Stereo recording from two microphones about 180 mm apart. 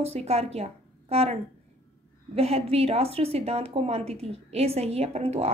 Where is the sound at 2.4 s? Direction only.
35° right (ahead or behind).